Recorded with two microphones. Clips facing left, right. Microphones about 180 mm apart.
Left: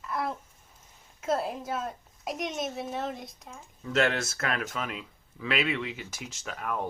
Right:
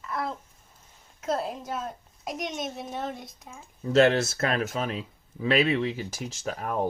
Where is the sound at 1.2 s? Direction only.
5° left (ahead or behind).